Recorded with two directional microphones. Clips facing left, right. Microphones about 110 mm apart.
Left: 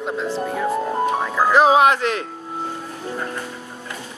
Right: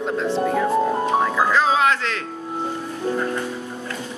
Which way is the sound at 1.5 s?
15° left (ahead or behind).